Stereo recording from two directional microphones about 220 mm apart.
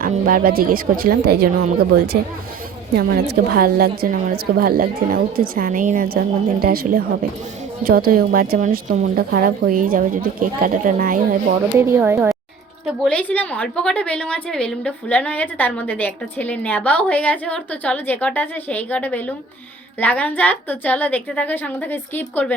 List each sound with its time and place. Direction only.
0.0 s a woman's voice: 40° right (ahead or behind)
2.9 s a woman's voice: 45° right (ahead or behind)
11.8 s speech: 10° right (ahead or behind)
12.8 s a woman's voice: 5° left (ahead or behind)